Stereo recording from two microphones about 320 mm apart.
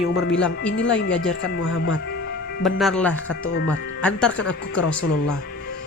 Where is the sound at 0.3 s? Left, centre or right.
Left.